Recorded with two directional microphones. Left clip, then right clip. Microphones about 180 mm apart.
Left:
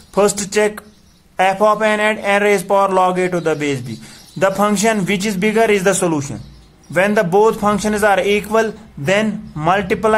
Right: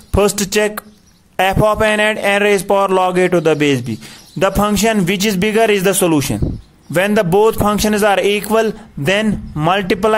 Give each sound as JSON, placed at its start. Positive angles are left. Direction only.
{"t": 0.1, "sound": "speech", "side_deg": -35}